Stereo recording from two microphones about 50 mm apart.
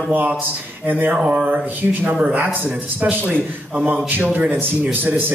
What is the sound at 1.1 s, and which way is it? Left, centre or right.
Speech, right.